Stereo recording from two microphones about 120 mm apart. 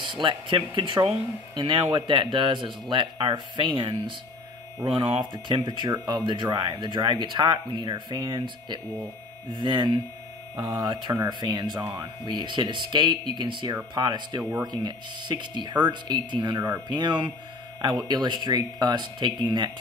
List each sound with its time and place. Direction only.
0.0 s speech: 45° right (ahead or behind)
14.4 s speech: 10° right (ahead or behind)
14.7 s speech: 35° right (ahead or behind)